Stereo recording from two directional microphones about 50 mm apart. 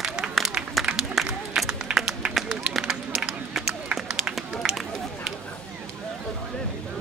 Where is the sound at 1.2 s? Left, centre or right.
Centre.